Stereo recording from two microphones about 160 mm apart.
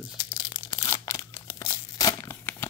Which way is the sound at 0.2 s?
30° left (ahead or behind).